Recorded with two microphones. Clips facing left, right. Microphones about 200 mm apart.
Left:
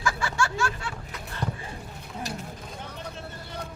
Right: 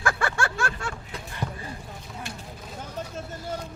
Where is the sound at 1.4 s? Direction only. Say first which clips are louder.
Left 1 dB; 5° right (ahead or behind).